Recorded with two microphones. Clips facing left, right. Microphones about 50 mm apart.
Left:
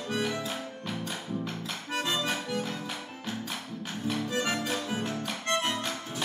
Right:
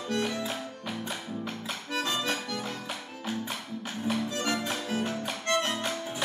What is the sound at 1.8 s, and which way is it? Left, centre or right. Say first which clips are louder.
Accordion: even; centre.